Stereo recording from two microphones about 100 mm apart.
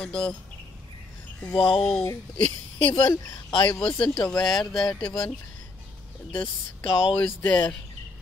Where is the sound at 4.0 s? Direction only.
10° left (ahead or behind).